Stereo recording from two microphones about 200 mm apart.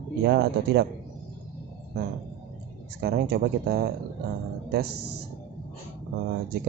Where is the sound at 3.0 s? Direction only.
50° right (ahead or behind).